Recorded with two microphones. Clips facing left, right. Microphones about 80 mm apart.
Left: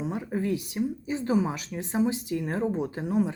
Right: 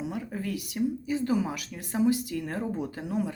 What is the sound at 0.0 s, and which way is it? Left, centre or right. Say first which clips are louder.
A woman's voice: left 4 dB; left.